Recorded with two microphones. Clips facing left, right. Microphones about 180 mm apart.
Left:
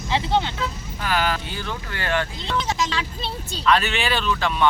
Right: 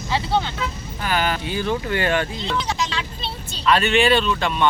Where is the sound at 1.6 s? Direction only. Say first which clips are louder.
Right 8 dB; 20° right (ahead or behind).